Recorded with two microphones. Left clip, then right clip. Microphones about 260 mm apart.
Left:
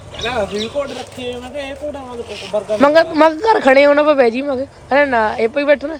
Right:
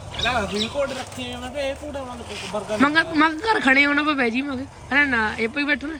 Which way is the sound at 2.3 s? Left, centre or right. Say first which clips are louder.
Left 4 dB; left.